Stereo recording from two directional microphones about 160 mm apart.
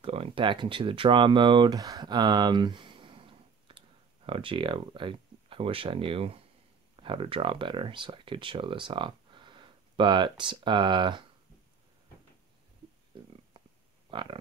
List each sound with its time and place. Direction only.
0.0 s speech: 35° right (ahead or behind)
13.5 s a sound: 30° right (ahead or behind)
14.1 s speech: 30° right (ahead or behind)